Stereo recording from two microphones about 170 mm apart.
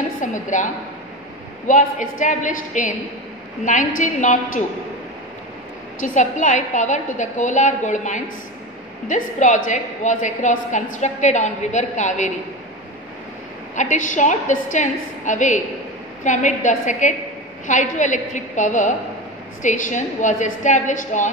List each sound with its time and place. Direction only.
0.2 s a woman's voice: 45° left (ahead or behind)
1.7 s a woman's voice: 50° left (ahead or behind)
5.9 s a woman's voice: 50° left (ahead or behind)
13.7 s a woman's voice: 45° left (ahead or behind)